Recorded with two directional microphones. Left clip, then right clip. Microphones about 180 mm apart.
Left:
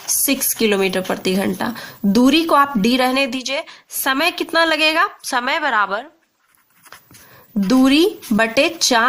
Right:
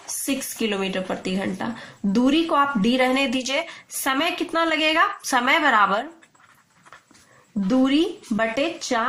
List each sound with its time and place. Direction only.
0.0 s speech: 45° left (ahead or behind)
7.7 s speech: 50° left (ahead or behind)